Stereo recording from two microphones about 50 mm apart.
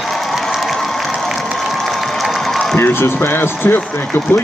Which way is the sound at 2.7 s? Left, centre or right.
Left.